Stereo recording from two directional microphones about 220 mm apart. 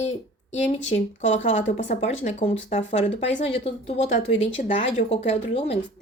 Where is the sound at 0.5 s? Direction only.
30° left (ahead or behind).